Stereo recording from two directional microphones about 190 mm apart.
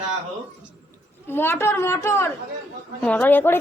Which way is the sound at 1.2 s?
10° left (ahead or behind).